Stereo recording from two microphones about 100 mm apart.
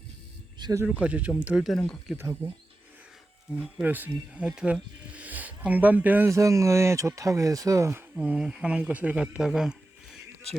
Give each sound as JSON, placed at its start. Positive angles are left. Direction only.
{"t": 0.9, "sound": "speech", "side_deg": -10}
{"t": 2.1, "sound": "speech", "side_deg": -25}
{"t": 3.8, "sound": "speech", "side_deg": -20}
{"t": 8.2, "sound": "speech", "side_deg": -10}